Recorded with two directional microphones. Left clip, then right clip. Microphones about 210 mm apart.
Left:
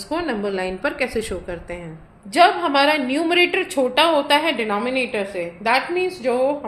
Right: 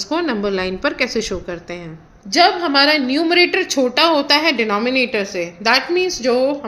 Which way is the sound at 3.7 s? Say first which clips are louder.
Right 1 dB; 25° right (ahead or behind).